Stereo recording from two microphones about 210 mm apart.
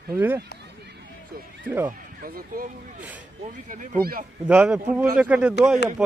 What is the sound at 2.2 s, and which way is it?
Speech, 40° right (ahead or behind).